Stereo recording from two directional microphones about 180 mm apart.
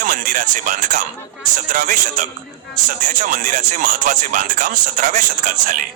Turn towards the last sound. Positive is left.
turn(degrees=-50)  # may be behind; listen again after turning